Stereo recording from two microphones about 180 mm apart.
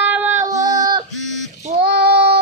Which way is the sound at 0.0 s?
10° right (ahead or behind).